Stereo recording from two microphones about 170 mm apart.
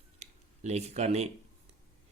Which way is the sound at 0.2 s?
40° right (ahead or behind).